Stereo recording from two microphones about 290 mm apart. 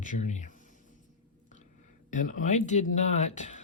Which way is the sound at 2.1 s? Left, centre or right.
Left.